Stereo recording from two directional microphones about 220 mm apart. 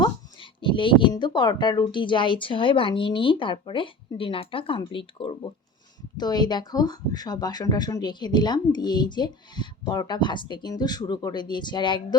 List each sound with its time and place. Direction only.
0.0 s speech: 20° left (ahead or behind)